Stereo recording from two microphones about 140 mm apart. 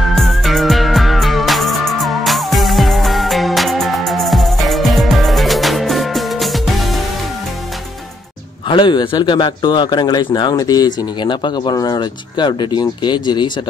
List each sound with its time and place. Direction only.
0.1 s music: centre (ahead or behind)
8.6 s speech: 35° left (ahead or behind)